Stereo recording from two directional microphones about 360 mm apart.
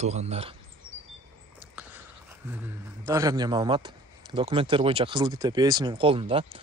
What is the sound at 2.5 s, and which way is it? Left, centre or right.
Speech, centre.